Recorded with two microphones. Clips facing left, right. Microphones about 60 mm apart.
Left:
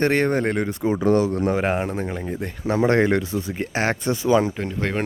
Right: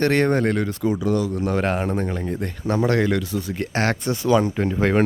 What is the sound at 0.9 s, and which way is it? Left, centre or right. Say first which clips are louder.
Speech: left 3 dB; left.